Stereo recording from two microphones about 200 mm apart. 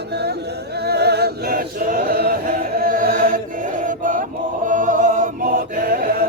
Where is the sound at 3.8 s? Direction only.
40° right (ahead or behind).